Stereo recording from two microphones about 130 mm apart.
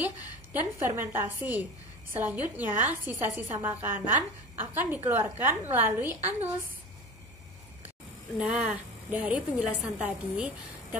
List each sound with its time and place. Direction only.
0.0 s a woman's voice: 15° right (ahead or behind)
8.4 s a woman's voice: 10° right (ahead or behind)